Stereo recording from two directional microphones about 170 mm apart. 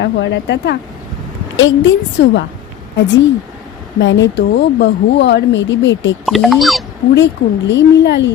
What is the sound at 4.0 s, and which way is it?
A woman's voice, 90° left.